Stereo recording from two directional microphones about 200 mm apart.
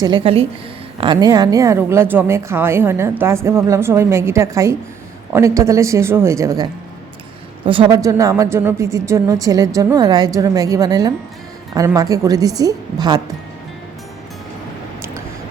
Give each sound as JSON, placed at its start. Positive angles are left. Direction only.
{"t": 0.0, "sound": "speech", "side_deg": -25}